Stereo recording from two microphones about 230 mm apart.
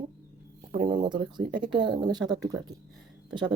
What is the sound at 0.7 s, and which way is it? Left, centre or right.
Speech, right.